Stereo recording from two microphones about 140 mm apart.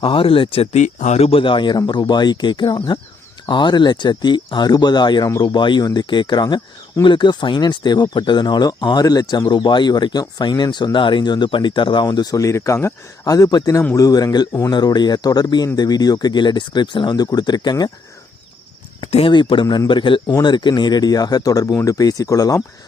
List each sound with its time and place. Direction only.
0.0 s speech: 40° left (ahead or behind)
18.9 s speech: 40° left (ahead or behind); by 22.6 s 25° left (ahead or behind)